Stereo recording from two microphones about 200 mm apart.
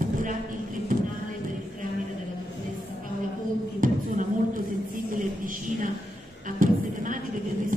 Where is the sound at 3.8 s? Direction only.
45° right (ahead or behind).